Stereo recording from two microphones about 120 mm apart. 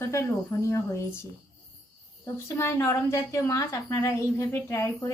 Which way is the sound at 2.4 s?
20° left (ahead or behind).